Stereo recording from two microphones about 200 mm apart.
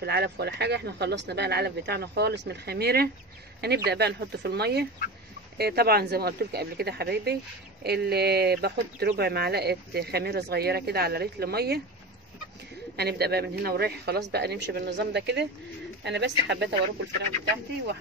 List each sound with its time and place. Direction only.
0.0 s speech: 55° right (ahead or behind)
12.9 s speech: 55° right (ahead or behind)